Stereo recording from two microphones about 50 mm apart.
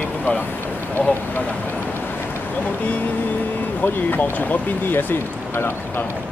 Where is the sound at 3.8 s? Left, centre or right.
Left.